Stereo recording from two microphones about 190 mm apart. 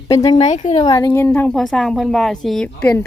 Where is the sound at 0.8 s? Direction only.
20° left (ahead or behind).